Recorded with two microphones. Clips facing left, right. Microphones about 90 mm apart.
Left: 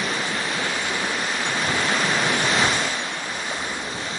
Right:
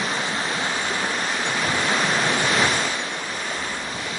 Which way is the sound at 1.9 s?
15° right (ahead or behind).